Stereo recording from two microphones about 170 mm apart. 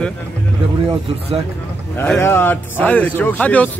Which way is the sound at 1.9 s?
15° left (ahead or behind).